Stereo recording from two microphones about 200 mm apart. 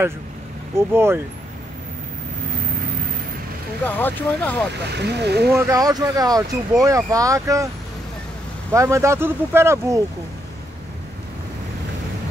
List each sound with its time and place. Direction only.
0.7 s speech: 10° right (ahead or behind)
3.8 s speech: 10° left (ahead or behind)
4.9 s speech: 55° right (ahead or behind)
5.5 s speech: 15° right (ahead or behind)
8.7 s speech: 15° right (ahead or behind)